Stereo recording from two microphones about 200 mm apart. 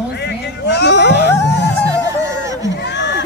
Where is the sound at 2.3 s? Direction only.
15° right (ahead or behind).